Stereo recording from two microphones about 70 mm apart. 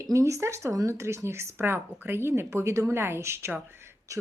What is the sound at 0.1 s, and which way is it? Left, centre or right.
Speech, right.